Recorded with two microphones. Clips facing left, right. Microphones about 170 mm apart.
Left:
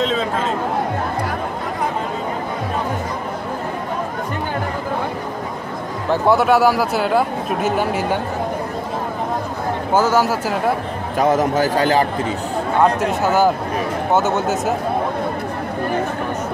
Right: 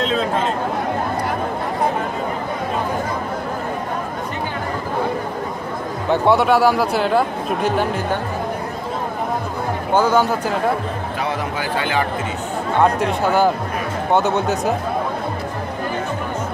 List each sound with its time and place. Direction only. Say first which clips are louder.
0.0 s speech: even; centre (ahead or behind)
6.2 s speech: left 1 dB; centre (ahead or behind)
9.9 s speech: even; 5° left (ahead or behind)
11.1 s a man's voice: left 10 dB; 45° left (ahead or behind)
13.0 s speech: left 1 dB; 5° left (ahead or behind)